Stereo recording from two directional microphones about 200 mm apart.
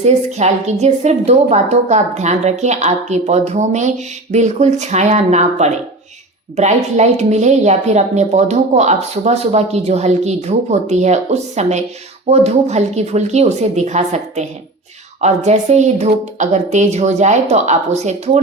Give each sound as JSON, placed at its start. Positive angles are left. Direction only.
{"t": 0.0, "sound": "a woman's voice", "side_deg": -35}